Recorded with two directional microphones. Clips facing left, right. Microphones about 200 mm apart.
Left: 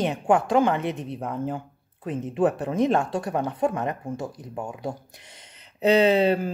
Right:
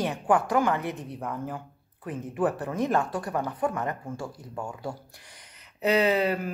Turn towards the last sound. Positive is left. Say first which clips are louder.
# left 5 dB
turn(degrees=30)  # may be behind; listen again after turning